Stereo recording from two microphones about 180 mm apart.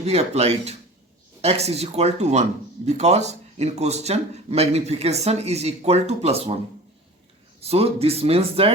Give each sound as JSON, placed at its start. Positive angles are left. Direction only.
{"t": 0.0, "sound": "speech", "side_deg": -35}
{"t": 7.6, "sound": "speech", "side_deg": -35}